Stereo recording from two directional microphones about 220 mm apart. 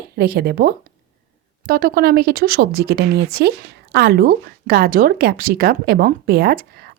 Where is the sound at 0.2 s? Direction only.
45° right (ahead or behind).